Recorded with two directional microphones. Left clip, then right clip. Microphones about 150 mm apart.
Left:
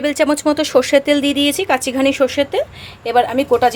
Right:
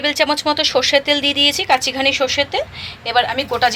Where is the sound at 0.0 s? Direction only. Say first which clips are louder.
Left 1 dB; 50° left (ahead or behind).